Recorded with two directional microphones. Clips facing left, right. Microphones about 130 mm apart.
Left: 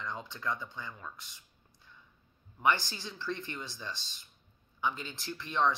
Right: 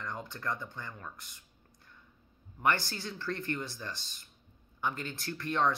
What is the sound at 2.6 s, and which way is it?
Speech, 15° left (ahead or behind).